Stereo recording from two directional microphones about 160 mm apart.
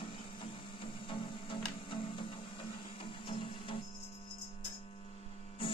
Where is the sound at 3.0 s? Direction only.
30° left (ahead or behind).